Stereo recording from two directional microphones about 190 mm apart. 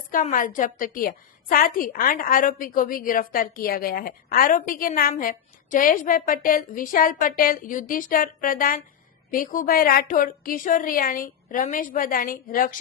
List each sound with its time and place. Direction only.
0.1 s a woman's voice: 45° left (ahead or behind)